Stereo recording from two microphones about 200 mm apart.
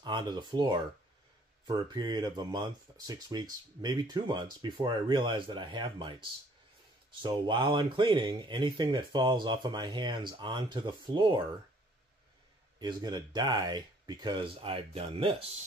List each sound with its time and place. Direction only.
0.0 s speech: 20° right (ahead or behind)
12.7 s speech: 20° right (ahead or behind)